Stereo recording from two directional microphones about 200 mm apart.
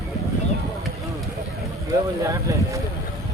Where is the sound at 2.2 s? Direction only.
15° right (ahead or behind).